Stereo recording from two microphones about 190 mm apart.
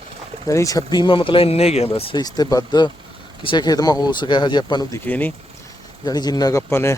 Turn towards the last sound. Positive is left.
turn(degrees=15)  # may be behind; listen again after turning